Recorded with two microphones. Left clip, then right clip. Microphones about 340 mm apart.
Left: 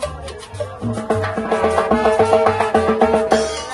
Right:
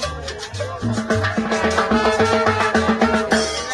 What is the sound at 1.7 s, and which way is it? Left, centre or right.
Music, left.